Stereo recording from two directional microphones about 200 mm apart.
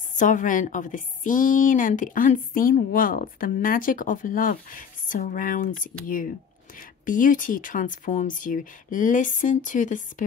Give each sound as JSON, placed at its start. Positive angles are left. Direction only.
{"t": 0.1, "sound": "a woman's voice", "side_deg": 40}